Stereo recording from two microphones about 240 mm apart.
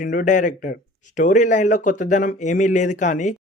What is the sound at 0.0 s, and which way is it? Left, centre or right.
Speech, left.